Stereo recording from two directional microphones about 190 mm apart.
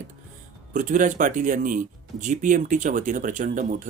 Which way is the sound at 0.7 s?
45° right (ahead or behind).